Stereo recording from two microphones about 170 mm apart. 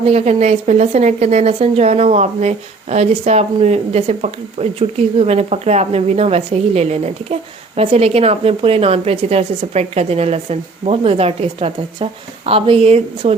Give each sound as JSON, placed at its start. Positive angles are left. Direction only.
{"t": 0.0, "sound": "speech", "side_deg": -40}